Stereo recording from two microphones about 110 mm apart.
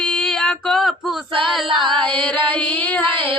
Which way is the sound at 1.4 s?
Centre (ahead or behind).